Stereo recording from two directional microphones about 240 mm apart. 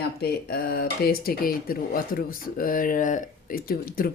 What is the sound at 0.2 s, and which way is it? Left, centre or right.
Speech, left.